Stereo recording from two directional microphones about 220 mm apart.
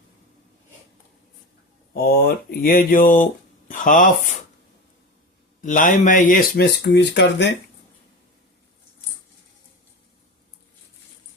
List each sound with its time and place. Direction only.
1.9 s speech: 45° left (ahead or behind)
3.7 s a sound: 35° left (ahead or behind)
5.6 s speech: 35° left (ahead or behind)